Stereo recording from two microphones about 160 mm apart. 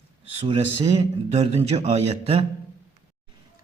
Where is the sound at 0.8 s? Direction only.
40° right (ahead or behind).